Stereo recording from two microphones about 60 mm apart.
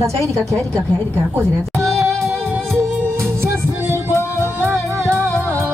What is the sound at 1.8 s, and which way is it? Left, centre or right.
Music, right.